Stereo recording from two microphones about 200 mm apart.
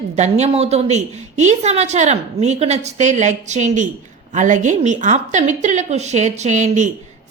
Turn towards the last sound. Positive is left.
turn(degrees=-35)  # may be behind; listen again after turning